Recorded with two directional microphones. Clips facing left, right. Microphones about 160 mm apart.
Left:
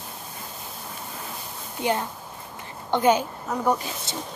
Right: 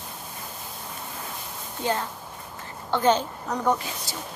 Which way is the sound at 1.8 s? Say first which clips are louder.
Left 2 dB; 15° left (ahead or behind).